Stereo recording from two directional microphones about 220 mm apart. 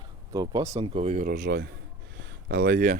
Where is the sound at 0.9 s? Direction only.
35° right (ahead or behind).